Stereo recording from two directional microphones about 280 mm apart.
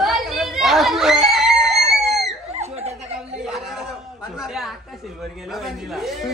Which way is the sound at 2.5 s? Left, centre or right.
Right.